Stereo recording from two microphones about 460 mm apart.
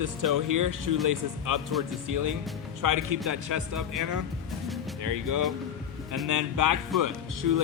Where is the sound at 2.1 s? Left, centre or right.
Right.